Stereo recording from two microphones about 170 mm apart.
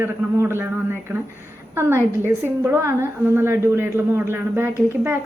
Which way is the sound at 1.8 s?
15° right (ahead or behind).